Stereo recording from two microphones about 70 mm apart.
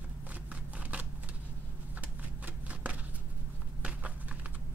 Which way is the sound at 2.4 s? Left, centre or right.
Right.